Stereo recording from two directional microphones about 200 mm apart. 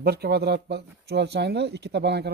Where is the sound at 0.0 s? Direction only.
50° right (ahead or behind).